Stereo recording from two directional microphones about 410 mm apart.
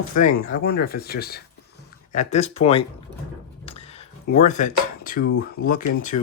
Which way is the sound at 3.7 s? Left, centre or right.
Centre.